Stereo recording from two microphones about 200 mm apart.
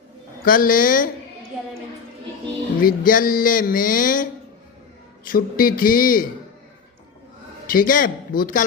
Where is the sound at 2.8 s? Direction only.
45° left (ahead or behind).